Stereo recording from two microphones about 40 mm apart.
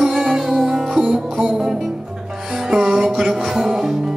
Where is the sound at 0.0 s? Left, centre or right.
Centre.